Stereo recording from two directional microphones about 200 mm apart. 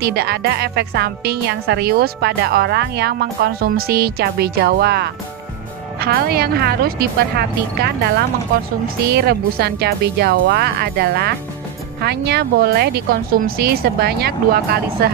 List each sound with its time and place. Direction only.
0.0 s a woman's voice: 55° right (ahead or behind)
9.1 s a woman's voice: 55° right (ahead or behind)